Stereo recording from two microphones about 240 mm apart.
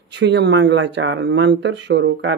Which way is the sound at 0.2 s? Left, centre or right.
Right.